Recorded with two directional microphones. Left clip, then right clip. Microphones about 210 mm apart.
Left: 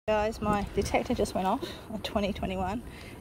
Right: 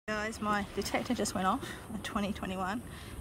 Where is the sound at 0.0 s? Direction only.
10° left (ahead or behind).